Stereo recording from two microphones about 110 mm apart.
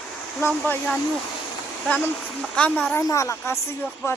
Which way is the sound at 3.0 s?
30° left (ahead or behind).